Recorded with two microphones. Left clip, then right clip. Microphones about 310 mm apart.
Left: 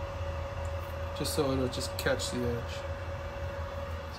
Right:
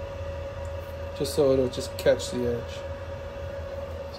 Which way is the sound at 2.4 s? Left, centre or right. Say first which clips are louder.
Right 5 dB; centre.